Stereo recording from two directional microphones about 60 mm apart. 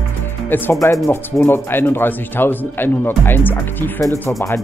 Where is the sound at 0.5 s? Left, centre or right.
Left.